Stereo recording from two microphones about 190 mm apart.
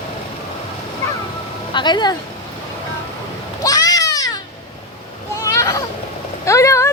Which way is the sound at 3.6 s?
20° left (ahead or behind).